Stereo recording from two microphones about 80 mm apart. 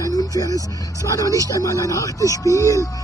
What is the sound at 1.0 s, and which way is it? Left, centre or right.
Speech, left.